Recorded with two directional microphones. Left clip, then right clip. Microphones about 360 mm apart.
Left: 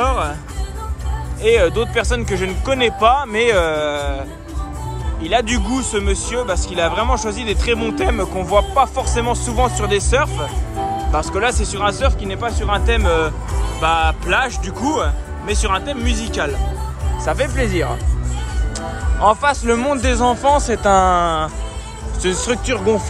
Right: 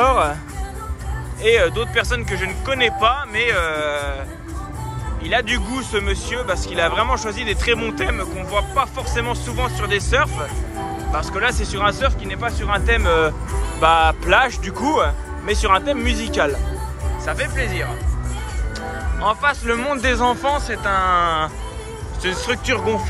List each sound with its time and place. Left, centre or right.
0.0 s music: centre
1.4 s speech: centre
5.2 s speech: centre
17.2 s speech: centre